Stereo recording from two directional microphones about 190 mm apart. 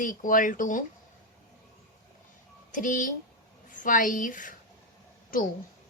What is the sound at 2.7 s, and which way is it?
A woman's voice, 45° left (ahead or behind).